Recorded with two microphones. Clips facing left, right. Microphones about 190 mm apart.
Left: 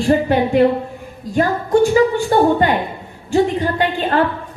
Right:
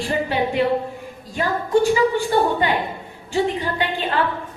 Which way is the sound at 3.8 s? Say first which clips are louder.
Left 5 dB; 45° left (ahead or behind).